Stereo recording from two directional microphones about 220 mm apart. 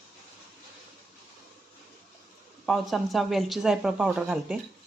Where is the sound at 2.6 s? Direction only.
Centre (ahead or behind).